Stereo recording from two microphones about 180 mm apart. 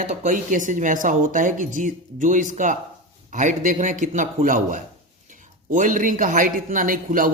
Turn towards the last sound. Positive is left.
turn(degrees=-50)  # may be behind; listen again after turning